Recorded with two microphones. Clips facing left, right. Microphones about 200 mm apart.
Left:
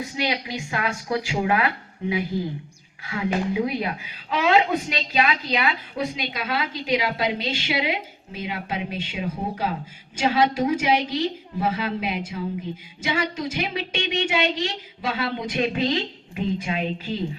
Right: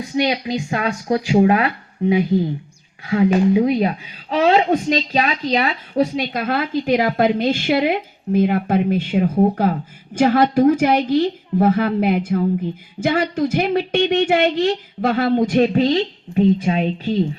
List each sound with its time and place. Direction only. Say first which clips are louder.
0.0 s a woman's voice: right 7 dB; 35° right (ahead or behind)
3.5 s a woman's voice: right 9 dB; 30° right (ahead or behind)
6.3 s a woman's voice: right 8 dB; 50° right (ahead or behind)
15.6 s a woman's voice: right 8 dB; 40° right (ahead or behind)